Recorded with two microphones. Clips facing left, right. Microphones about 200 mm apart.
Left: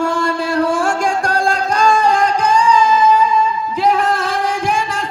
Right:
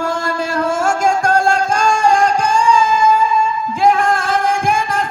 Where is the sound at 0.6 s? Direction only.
40° right (ahead or behind).